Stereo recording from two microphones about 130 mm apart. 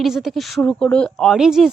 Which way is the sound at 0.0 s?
Centre (ahead or behind).